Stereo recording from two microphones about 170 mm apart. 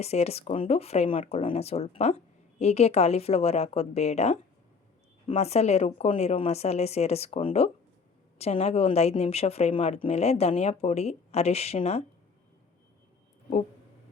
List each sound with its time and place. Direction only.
0.0 s speech: 40° left (ahead or behind)